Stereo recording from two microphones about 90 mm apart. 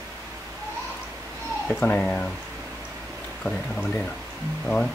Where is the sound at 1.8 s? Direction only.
15° left (ahead or behind).